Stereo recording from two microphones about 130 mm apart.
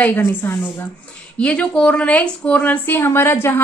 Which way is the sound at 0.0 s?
15° left (ahead or behind).